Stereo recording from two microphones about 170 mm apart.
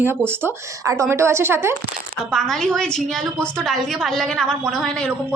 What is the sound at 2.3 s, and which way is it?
A woman's voice, centre (ahead or behind).